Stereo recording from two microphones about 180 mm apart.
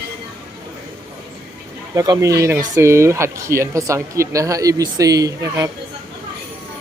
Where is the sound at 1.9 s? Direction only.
20° right (ahead or behind).